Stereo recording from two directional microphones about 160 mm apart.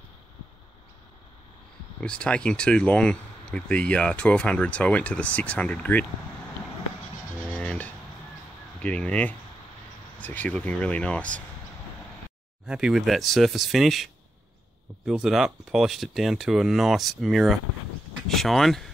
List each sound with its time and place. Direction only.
2.0 s speech: 5° left (ahead or behind)
7.4 s a sound: 10° left (ahead or behind)
8.8 s speech: 5° left (ahead or behind)
12.6 s speech: 5° right (ahead or behind)
15.0 s speech: 5° right (ahead or behind)